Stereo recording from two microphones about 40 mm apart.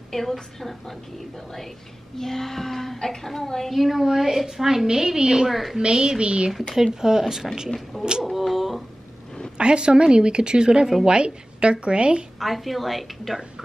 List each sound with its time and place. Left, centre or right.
0.1 s a woman's voice: centre
3.7 s a woman's voice: centre
5.5 s a woman's voice: centre
5.8 s a woman's voice: right
6.7 s a woman's voice: centre
8.2 s speech: centre
9.6 s a woman's voice: right
12.4 s a woman's voice: centre